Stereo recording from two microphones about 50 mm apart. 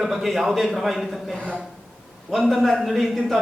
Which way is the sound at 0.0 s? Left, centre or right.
Centre.